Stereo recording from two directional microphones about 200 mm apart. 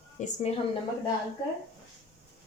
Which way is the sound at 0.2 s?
40° left (ahead or behind).